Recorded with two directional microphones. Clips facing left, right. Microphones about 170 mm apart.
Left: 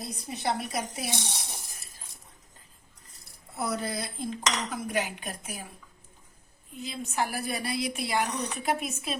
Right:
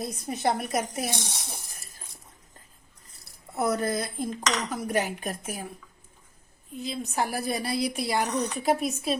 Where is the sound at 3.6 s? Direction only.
50° right (ahead or behind).